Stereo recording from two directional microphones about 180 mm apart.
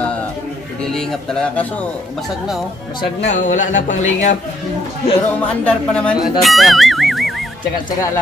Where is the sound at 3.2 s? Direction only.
45° left (ahead or behind).